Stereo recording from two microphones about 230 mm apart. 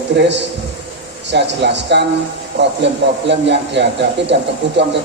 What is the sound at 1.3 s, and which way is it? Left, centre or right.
A man's voice, right.